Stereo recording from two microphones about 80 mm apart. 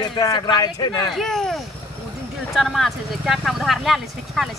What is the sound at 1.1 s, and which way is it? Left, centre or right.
Speech, centre.